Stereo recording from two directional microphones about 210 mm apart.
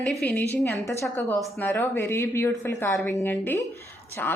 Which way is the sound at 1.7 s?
10° left (ahead or behind).